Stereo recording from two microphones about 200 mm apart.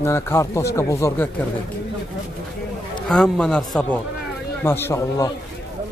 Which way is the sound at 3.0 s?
5° left (ahead or behind).